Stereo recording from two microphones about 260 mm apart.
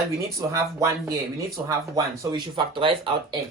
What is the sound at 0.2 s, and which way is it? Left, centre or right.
Speech, centre.